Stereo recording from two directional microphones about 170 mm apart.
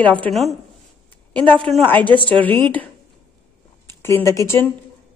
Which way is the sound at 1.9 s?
10° left (ahead or behind).